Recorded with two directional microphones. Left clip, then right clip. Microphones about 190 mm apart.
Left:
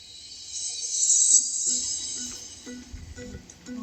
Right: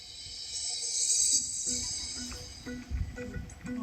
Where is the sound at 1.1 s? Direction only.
65° right (ahead or behind).